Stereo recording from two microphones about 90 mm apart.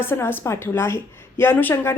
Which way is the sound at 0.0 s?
25° left (ahead or behind).